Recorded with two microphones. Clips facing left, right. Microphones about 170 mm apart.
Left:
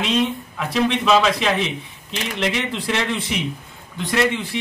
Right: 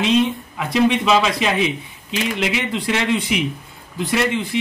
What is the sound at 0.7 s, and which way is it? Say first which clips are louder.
Speech: right 2 dB; 5° right (ahead or behind).